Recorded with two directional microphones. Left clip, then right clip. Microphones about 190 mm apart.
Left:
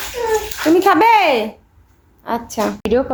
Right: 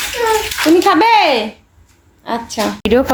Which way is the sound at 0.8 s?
5° left (ahead or behind).